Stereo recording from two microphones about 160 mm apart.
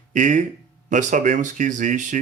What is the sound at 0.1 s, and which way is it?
Speech, 50° right (ahead or behind).